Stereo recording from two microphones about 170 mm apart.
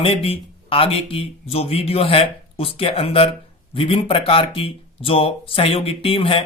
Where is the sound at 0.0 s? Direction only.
35° left (ahead or behind).